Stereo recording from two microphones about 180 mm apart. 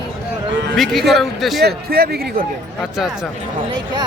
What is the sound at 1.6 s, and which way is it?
Speech, 60° right (ahead or behind).